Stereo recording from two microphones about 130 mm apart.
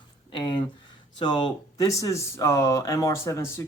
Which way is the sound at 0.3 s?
35° left (ahead or behind).